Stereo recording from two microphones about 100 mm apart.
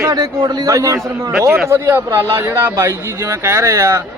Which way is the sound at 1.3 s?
20° right (ahead or behind).